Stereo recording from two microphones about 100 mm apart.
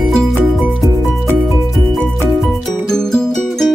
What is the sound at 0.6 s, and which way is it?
Music, 5° right (ahead or behind).